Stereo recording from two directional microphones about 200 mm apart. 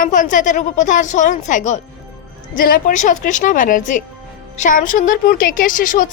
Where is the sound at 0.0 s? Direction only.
40° left (ahead or behind).